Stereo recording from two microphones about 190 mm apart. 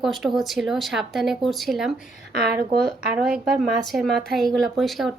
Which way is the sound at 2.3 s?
55° right (ahead or behind).